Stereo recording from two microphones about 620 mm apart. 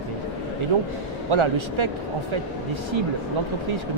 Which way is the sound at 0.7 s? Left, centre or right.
Right.